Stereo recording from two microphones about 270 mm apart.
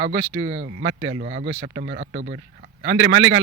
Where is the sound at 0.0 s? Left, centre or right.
Right.